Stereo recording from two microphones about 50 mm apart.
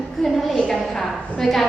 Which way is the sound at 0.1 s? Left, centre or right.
Centre.